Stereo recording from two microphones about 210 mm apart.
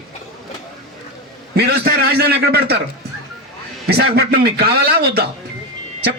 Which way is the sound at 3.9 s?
50° right (ahead or behind).